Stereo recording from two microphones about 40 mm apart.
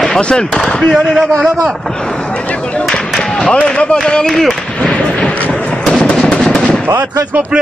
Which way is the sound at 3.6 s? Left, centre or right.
Left.